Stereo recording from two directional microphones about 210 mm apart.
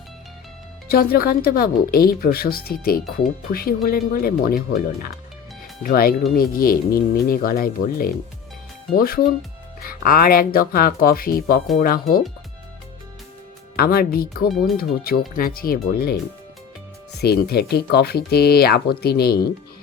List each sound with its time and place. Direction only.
0.9 s speech: 45° left (ahead or behind)
13.7 s speech: 45° left (ahead or behind)
17.2 s speech: 50° left (ahead or behind)